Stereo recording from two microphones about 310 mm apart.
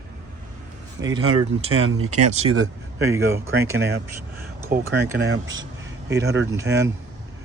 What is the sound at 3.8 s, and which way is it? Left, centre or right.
Speech, right.